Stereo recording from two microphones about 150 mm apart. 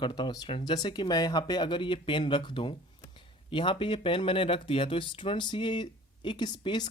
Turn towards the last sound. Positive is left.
turn(degrees=30)  # may be behind; listen again after turning